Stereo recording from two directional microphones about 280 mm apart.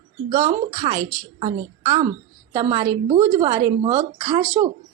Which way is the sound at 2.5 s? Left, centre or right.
Centre.